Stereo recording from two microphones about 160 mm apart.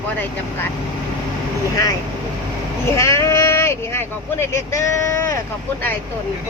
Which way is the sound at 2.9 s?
20° left (ahead or behind).